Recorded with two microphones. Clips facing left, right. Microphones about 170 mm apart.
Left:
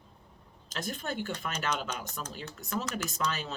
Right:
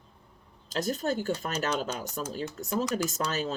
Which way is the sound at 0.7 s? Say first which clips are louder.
Right 7 dB; 40° right (ahead or behind).